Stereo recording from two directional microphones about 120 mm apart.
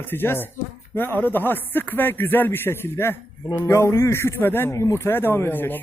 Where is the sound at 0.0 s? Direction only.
15° left (ahead or behind).